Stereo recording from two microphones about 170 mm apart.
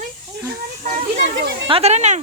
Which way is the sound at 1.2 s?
85° right.